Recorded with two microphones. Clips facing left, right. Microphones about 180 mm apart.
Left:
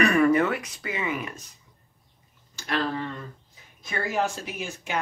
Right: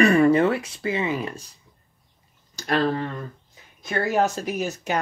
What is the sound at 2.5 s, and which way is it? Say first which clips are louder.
Speech: right 5 dB; 45° right (ahead or behind).